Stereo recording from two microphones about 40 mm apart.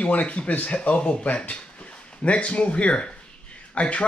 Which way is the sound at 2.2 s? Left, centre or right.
Left.